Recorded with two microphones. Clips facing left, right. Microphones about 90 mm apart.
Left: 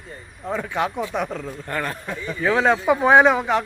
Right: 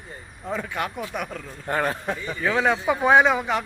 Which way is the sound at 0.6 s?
Centre (ahead or behind).